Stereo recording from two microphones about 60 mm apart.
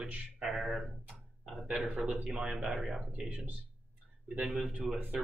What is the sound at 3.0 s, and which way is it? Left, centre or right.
Speech, right.